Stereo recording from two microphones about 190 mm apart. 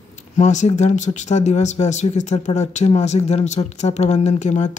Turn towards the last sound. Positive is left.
turn(degrees=40)  # may be behind; listen again after turning